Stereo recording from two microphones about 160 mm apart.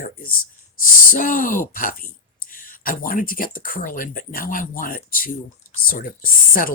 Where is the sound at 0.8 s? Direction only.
60° left (ahead or behind).